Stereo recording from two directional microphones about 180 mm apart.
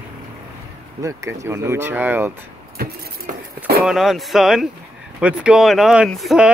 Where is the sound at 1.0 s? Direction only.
15° right (ahead or behind).